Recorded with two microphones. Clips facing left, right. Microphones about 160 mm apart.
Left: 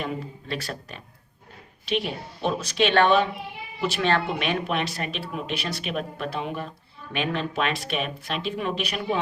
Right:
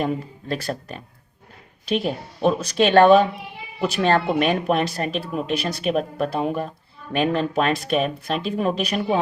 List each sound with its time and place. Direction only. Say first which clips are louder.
0.0 s speech: right 6 dB; 45° right (ahead or behind)